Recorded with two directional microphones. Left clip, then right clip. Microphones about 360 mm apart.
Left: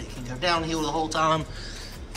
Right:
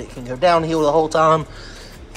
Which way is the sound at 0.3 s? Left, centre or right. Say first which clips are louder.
Right 10 dB; centre.